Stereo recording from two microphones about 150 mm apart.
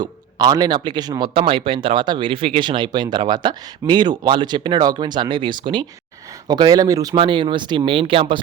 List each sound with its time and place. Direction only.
0.0 s speech: 25° right (ahead or behind)